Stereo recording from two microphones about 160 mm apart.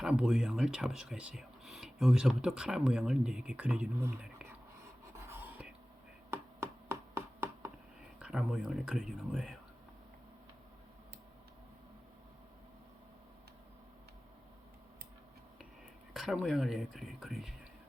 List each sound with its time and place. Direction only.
0.0 s speech: 5° right (ahead or behind)
5.1 s a sound: 15° right (ahead or behind)
6.3 s chopping: 15° right (ahead or behind)
8.2 s speech: 5° right (ahead or behind)
16.1 s speech: 5° right (ahead or behind)